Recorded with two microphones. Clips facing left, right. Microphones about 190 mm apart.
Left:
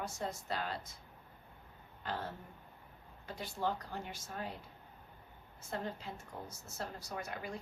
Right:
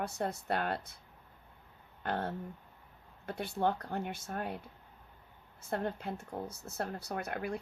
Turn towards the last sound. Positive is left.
turn(degrees=-60)  # may be behind; listen again after turning